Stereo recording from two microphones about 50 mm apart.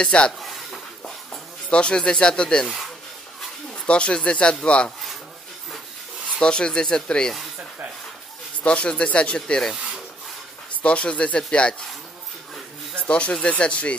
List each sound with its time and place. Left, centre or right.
0.0 s speech: centre
0.4 s speech: centre
1.0 s a sound: centre
3.7 s speech: left
6.4 s speech: centre
8.6 s speech: left
10.8 s speech: left
12.9 s speech: left